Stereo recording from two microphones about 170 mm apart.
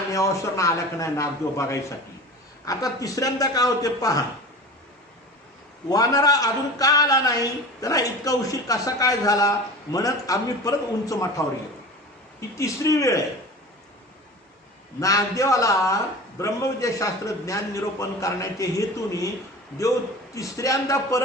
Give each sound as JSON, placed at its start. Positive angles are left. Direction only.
{"t": 0.1, "sound": "a man's voice", "side_deg": 20}
{"t": 5.9, "sound": "a man's voice", "side_deg": 20}
{"t": 12.5, "sound": "a man's voice", "side_deg": 20}
{"t": 15.0, "sound": "a man's voice", "side_deg": 20}
{"t": 20.3, "sound": "a man's voice", "side_deg": 20}